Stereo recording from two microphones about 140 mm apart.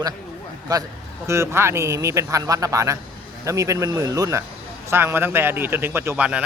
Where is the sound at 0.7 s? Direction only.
25° right (ahead or behind).